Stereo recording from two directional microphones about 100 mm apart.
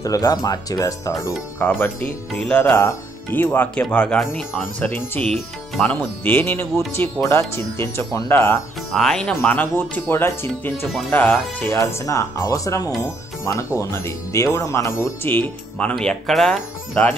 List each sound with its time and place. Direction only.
0.0 s speech: 35° left (ahead or behind)
1.6 s speech: 15° left (ahead or behind)
2.7 s speech: 20° left (ahead or behind)
5.3 s speech: 5° left (ahead or behind)
6.2 s speech: 20° left (ahead or behind)
8.9 s speech: 5° left (ahead or behind); by 11.8 s 20° left (ahead or behind)
11.8 s speech: 30° left (ahead or behind)
15.9 s speech: 5° left (ahead or behind)